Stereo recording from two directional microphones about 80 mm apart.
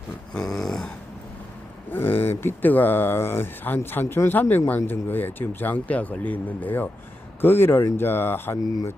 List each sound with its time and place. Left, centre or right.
0.3 s dog: centre
1.9 s speech: left